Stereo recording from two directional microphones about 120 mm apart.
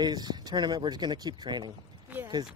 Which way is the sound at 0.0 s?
35° right (ahead or behind).